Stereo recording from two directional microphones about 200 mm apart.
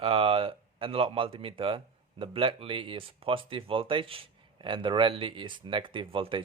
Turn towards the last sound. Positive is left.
turn(degrees=-25)  # may be behind; listen again after turning